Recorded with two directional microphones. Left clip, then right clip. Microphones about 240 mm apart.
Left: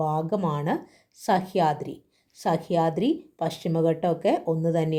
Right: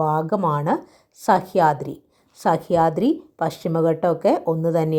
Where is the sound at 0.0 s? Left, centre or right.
Centre.